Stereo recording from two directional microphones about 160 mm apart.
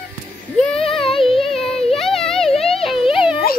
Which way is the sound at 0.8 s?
35° left (ahead or behind).